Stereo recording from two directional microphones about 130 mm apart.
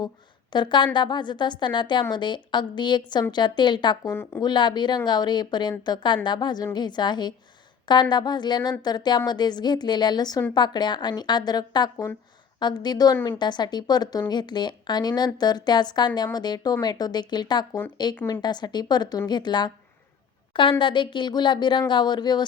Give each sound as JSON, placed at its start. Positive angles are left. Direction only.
{"t": 0.5, "sound": "a woman's voice", "side_deg": 35}
{"t": 4.0, "sound": "speech", "side_deg": 20}
{"t": 4.4, "sound": "a woman's voice", "side_deg": 35}
{"t": 13.1, "sound": "a woman's voice", "side_deg": 15}
{"t": 13.4, "sound": "a woman's voice", "side_deg": 35}